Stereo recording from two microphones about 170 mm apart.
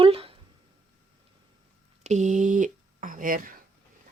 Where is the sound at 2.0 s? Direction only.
45° right (ahead or behind).